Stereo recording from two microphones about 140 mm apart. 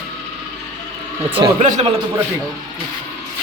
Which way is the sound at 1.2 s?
35° right (ahead or behind).